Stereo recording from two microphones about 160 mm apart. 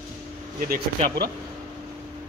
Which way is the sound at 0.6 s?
65° right (ahead or behind).